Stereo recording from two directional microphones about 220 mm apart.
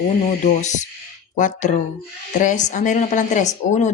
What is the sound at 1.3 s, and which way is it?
A woman's voice, 35° left (ahead or behind).